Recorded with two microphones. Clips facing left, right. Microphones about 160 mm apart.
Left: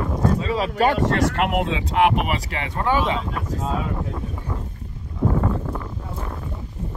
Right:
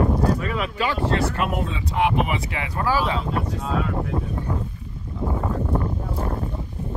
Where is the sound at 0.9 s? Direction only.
70° left (ahead or behind).